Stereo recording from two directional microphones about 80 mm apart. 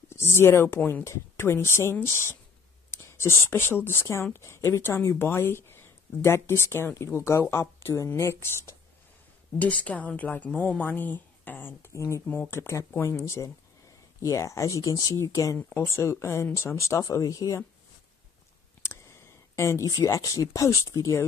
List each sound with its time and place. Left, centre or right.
0.1 s speech: left
0.7 s speech: centre
1.0 s speech: left
9.6 s speech: centre
11.9 s speech: left
15.5 s speech: centre
15.9 s speech: left
18.8 s speech: left